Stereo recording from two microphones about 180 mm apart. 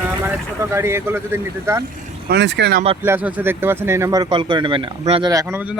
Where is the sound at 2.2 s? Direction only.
70° right (ahead or behind).